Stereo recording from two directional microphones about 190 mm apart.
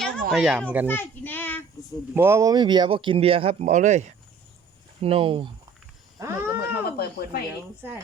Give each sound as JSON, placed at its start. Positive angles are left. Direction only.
{"t": 0.0, "sound": "children playing", "side_deg": 0}
{"t": 0.9, "sound": "a child's voice", "side_deg": 10}
{"t": 2.1, "sound": "speech", "side_deg": -15}
{"t": 6.1, "sound": "wild animals", "side_deg": -15}
{"t": 6.6, "sound": "cat", "side_deg": 55}